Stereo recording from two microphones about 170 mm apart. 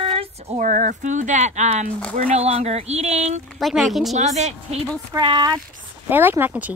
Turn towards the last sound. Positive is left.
turn(degrees=-10)  # may be behind; listen again after turning